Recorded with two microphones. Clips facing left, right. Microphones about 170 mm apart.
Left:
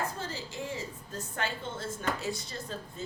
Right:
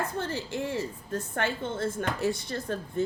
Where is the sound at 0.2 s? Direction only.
65° right (ahead or behind).